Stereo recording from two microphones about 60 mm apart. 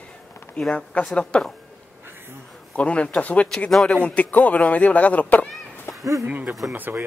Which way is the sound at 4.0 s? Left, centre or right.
Left.